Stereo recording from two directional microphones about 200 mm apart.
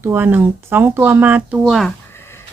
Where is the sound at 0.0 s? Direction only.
10° right (ahead or behind).